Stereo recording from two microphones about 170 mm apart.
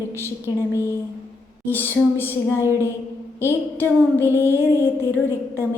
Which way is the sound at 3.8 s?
15° right (ahead or behind).